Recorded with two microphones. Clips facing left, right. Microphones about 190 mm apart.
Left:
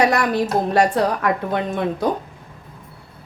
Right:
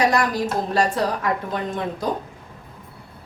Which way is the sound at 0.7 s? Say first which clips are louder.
Left 3 dB; 65° left (ahead or behind).